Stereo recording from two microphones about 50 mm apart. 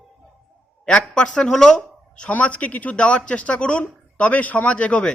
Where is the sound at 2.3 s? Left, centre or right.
Left.